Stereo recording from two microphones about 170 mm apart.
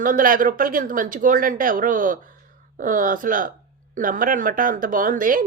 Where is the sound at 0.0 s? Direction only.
55° right (ahead or behind).